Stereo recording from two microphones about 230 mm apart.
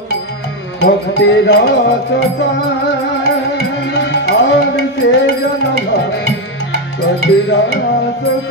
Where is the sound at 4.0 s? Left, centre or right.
Left.